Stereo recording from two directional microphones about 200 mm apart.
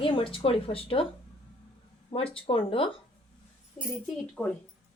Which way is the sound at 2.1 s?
30° left (ahead or behind).